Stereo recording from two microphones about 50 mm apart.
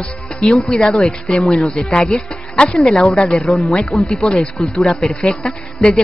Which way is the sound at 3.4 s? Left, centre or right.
Centre.